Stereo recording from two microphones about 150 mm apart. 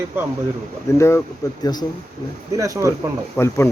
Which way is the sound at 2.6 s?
20° right (ahead or behind).